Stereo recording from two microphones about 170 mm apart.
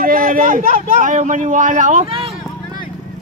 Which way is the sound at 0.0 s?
55° right (ahead or behind).